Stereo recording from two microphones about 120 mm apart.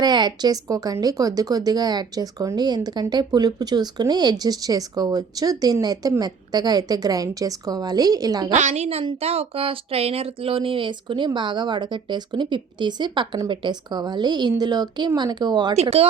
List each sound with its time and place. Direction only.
0.0 s a woman's voice: 35° right (ahead or behind)
8.5 s a woman's voice: 80° right; by 15.7 s 35° right (ahead or behind)
15.7 s speech: 65° right (ahead or behind)